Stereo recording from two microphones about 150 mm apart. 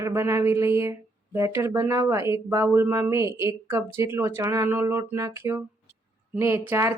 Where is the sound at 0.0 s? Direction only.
20° right (ahead or behind).